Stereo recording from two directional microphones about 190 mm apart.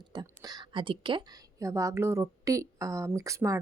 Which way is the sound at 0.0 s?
20° right (ahead or behind).